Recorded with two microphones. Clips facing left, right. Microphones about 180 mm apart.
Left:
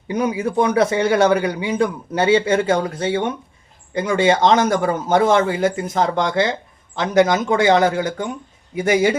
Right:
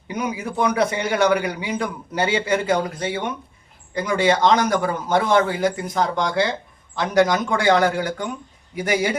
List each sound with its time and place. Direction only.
0.2 s a man's voice: 30° left (ahead or behind)